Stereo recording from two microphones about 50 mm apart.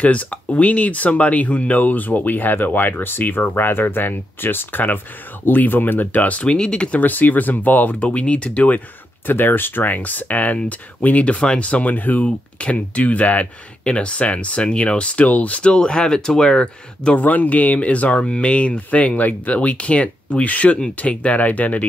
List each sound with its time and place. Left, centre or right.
0.0 s speech: left
6.4 s speech: centre
7.0 s speech: left
9.3 s speech: left; by 17.2 s centre
17.2 s speech: left